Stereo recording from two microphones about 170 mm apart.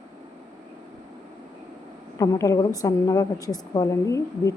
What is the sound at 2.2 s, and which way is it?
A woman's voice, 20° left (ahead or behind).